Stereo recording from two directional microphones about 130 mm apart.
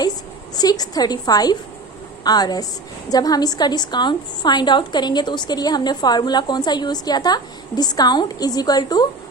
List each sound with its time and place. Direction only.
0.5 s a woman's voice: 30° left (ahead or behind)